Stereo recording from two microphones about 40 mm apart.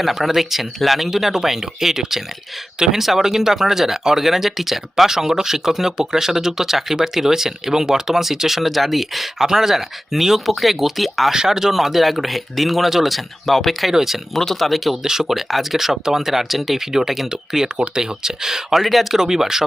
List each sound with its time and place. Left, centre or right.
0.0 s speech: centre
11.3 s speech: centre
14.3 s speech: centre
15.0 s speech: centre
18.8 s speech: centre
19.2 s speech: centre